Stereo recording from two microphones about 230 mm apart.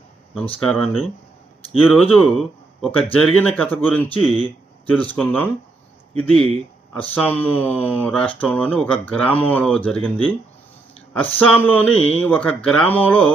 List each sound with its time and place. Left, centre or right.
0.3 s speech: centre
11.3 s speech: centre